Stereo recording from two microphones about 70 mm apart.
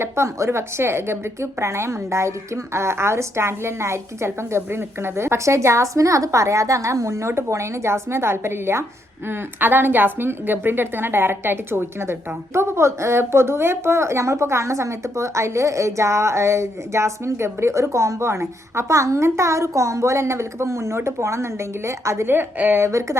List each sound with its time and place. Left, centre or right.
0.0 s a woman's voice: right
22.3 s a woman's voice: right
22.9 s speech: right